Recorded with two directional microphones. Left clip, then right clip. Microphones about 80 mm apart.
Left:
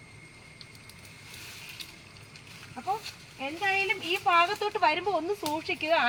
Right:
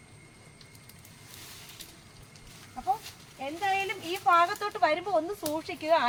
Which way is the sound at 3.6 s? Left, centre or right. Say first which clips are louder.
Left 2 dB; right.